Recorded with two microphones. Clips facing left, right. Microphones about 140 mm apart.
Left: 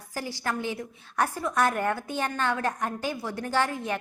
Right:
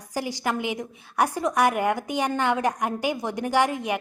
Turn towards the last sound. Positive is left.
turn(degrees=-15)  # may be behind; listen again after turning